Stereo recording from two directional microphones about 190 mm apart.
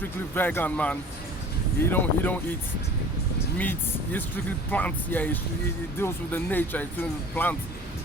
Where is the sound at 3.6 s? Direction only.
10° left (ahead or behind).